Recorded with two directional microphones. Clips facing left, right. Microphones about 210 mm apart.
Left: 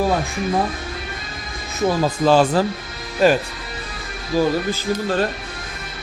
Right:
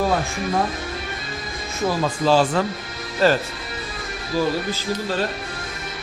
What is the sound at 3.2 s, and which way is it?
Speech, 15° left (ahead or behind).